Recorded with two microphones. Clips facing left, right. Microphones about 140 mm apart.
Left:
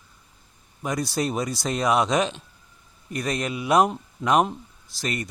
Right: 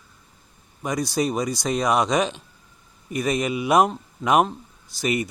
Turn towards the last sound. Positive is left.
turn(degrees=-5)  # may be behind; listen again after turning